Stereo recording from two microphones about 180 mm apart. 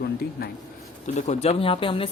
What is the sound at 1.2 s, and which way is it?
Speech, 40° left (ahead or behind).